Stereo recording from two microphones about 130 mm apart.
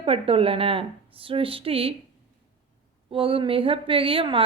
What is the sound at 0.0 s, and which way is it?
A woman's voice, 45° right (ahead or behind).